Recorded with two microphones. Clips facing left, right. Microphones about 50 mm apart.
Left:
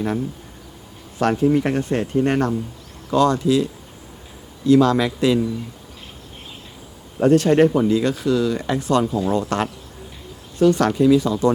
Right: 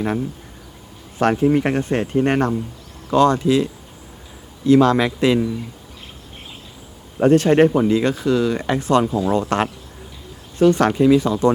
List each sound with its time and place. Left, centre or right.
1.2 s speech: right
7.2 s speech: right